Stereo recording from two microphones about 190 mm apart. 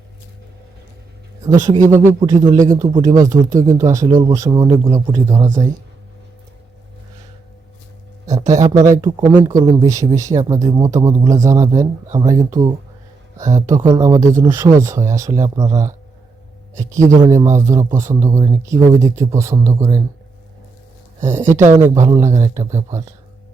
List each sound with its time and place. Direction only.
1.5 s speech: 40° right (ahead or behind)
2.0 s speech: 15° right (ahead or behind)
8.4 s speech: 15° right (ahead or behind)
21.2 s speech: 40° right (ahead or behind)
21.9 s speech: 15° right (ahead or behind)